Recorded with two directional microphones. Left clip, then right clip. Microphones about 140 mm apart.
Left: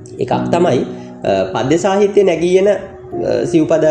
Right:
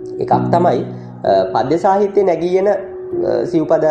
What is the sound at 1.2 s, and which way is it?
Speech, 20° left (ahead or behind).